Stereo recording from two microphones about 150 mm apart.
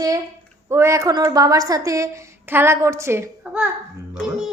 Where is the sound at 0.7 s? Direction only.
20° right (ahead or behind).